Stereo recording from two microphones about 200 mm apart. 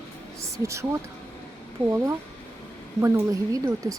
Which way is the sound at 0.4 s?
15° right (ahead or behind).